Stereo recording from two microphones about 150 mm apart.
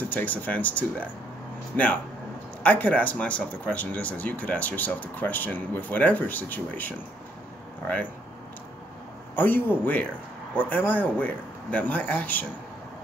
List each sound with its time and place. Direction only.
0.1 s speech: 10° left (ahead or behind)
9.3 s speech: 10° left (ahead or behind)